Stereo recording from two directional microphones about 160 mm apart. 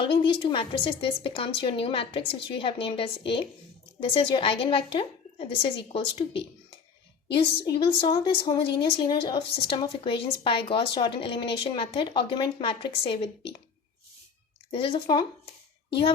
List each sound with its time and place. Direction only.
0.0 s a woman's voice: 35° left (ahead or behind)
14.7 s a woman's voice: 35° left (ahead or behind)